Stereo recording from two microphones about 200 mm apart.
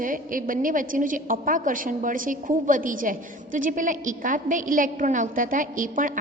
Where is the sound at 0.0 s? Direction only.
45° right (ahead or behind).